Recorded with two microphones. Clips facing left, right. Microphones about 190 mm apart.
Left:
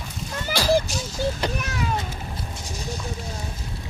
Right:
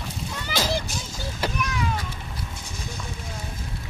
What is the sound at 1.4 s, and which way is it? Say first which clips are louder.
Speech: left 2 dB; 5° right (ahead or behind).